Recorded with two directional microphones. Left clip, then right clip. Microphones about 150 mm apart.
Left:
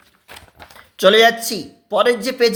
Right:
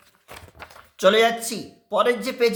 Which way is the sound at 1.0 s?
30° left (ahead or behind).